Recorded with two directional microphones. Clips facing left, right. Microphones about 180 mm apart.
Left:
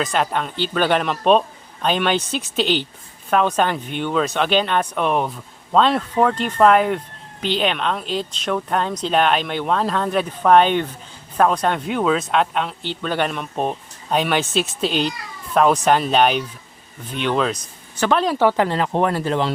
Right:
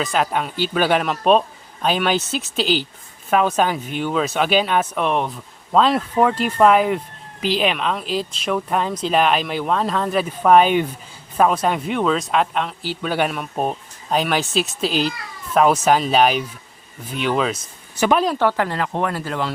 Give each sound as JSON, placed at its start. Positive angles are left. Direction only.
{"t": 0.0, "sound": "speech", "side_deg": 0}
{"t": 18.4, "sound": "speech", "side_deg": 20}